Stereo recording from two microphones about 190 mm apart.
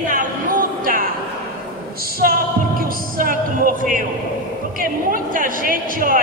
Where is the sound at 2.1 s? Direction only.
50° right (ahead or behind).